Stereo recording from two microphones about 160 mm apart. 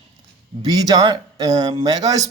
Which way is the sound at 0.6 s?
25° right (ahead or behind).